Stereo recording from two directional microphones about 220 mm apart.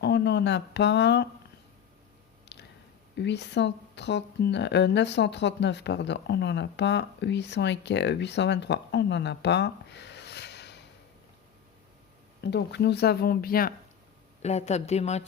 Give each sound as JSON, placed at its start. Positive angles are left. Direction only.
{"t": 0.0, "sound": "speech", "side_deg": 50}
{"t": 2.5, "sound": "squish", "side_deg": 50}
{"t": 3.2, "sound": "speech", "side_deg": 50}
{"t": 12.4, "sound": "speech", "side_deg": 50}
{"t": 14.4, "sound": "speech", "side_deg": 30}